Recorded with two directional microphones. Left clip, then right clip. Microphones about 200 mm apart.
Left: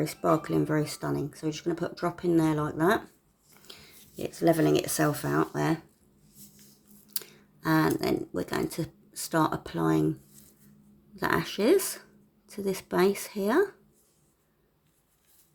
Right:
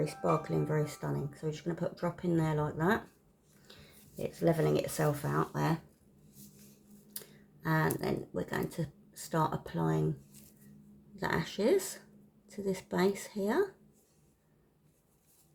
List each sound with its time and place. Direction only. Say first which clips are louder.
0.3 s speech: left 7 dB; 40° left (ahead or behind)
4.2 s speech: left 6 dB; 35° left (ahead or behind)
7.6 s speech: left 7 dB; 35° left (ahead or behind)
11.1 s speech: left 6 dB; 35° left (ahead or behind)